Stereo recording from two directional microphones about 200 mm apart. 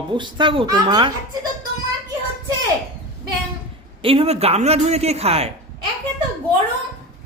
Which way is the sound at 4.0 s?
30° right (ahead or behind).